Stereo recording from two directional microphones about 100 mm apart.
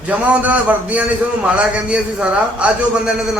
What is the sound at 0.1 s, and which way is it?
A man's voice, 15° right (ahead or behind).